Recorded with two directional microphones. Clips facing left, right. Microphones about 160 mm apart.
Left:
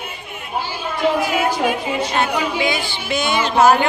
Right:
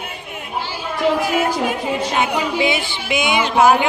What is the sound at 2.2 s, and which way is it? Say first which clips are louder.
Speech: right 1 dB; 20° right (ahead or behind).